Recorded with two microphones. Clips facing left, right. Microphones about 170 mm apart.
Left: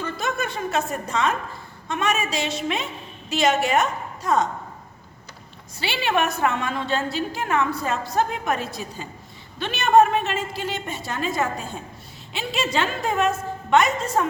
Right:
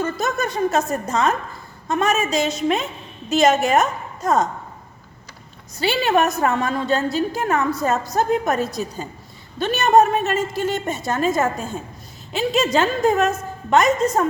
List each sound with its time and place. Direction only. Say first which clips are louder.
0.0 s a woman's voice: right 4 dB; 40° right (ahead or behind)
5.7 s a woman's voice: right 5 dB; 40° right (ahead or behind)